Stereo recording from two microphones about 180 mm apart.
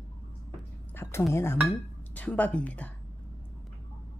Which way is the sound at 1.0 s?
10° left (ahead or behind).